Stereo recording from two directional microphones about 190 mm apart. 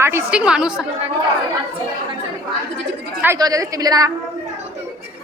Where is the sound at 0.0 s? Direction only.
15° right (ahead or behind).